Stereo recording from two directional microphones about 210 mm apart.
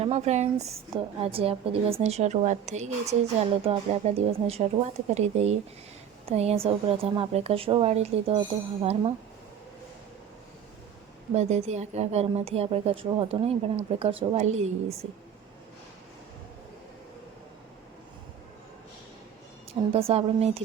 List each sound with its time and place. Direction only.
0.0 s a woman's voice: 30° right (ahead or behind)
11.3 s a woman's voice: 30° right (ahead or behind)
19.9 s a woman's voice: 30° right (ahead or behind)